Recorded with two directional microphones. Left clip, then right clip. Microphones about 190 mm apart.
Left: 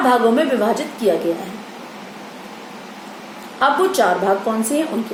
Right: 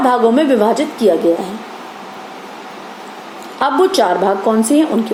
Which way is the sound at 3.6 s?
40° right (ahead or behind).